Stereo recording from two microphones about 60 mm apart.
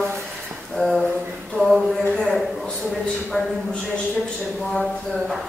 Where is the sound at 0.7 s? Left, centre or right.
Centre.